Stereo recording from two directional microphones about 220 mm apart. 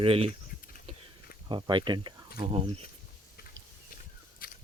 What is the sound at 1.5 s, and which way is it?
Speech, 20° right (ahead or behind).